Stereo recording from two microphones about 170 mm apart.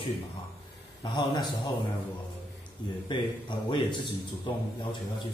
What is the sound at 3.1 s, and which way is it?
Speech, 30° left (ahead or behind).